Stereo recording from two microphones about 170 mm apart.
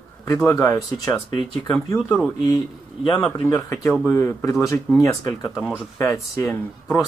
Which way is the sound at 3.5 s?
20° left (ahead or behind).